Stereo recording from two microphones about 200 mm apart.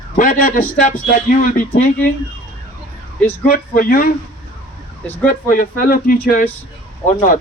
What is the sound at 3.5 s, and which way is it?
Speech, 45° left (ahead or behind).